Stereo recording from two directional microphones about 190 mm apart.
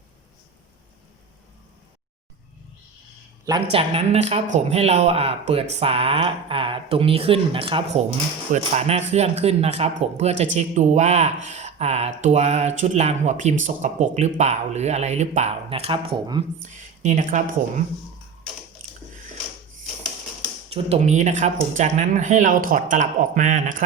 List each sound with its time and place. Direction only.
3.7 s speech: 30° right (ahead or behind)
16.6 s speech: 40° right (ahead or behind)
20.7 s speech: 30° right (ahead or behind)